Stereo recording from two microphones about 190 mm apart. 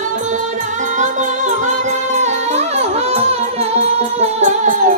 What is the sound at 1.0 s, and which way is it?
Music, 40° right (ahead or behind).